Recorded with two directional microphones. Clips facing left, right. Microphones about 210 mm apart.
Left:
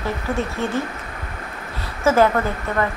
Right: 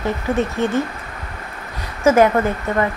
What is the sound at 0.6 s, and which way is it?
Speech, 20° right (ahead or behind).